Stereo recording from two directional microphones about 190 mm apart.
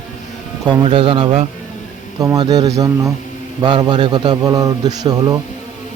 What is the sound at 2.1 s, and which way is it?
A man's voice, 20° right (ahead or behind).